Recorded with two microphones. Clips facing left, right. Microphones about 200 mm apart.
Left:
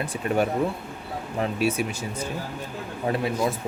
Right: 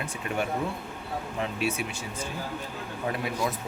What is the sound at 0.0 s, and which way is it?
Speech, 35° left (ahead or behind).